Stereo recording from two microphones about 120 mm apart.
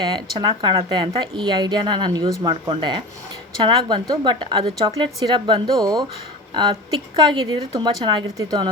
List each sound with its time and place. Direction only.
0.3 s speech: 40° right (ahead or behind)
5.7 s speech: 30° right (ahead or behind)